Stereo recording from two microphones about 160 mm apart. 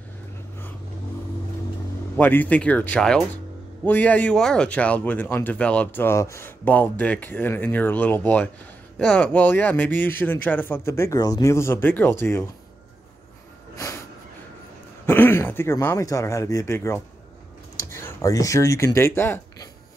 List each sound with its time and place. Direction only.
2.1 s speech: 10° left (ahead or behind)
13.7 s snort: 20° left (ahead or behind)
15.0 s speech: 15° left (ahead or behind)